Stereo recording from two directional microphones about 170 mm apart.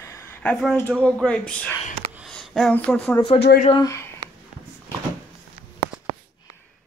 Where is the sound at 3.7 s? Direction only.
20° left (ahead or behind).